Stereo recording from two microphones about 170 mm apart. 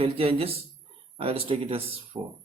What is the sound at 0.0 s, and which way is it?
Speech, 35° right (ahead or behind).